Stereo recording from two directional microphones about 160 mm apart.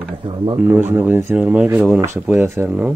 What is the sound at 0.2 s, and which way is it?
Speech, 30° right (ahead or behind).